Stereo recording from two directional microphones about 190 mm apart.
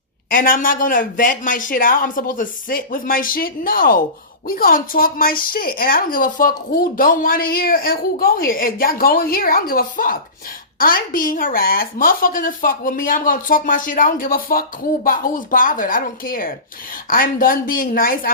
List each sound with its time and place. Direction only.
0.3 s a woman's voice: 45° left (ahead or behind)